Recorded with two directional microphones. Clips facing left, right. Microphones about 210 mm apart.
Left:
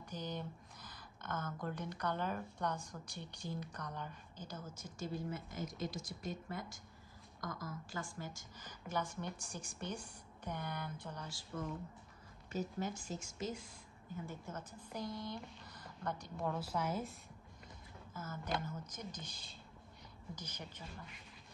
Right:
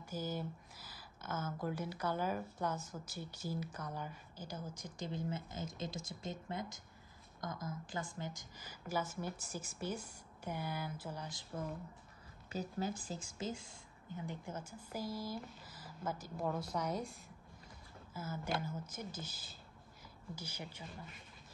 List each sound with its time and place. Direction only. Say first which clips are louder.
0.0 s speech: right 3 dB; 5° right (ahead or behind)
12.4 s speech: even; 35° right (ahead or behind)
14.2 s a woman's voice: right 4 dB; 15° right (ahead or behind); by 17.2 s centre (ahead or behind)
18.1 s speech: right 1 dB; 10° right (ahead or behind)